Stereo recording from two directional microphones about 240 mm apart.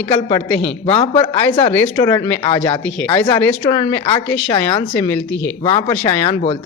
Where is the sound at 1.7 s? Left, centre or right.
Centre.